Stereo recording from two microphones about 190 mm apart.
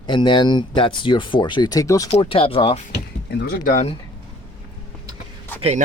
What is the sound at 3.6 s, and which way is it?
Speech, 40° left (ahead or behind).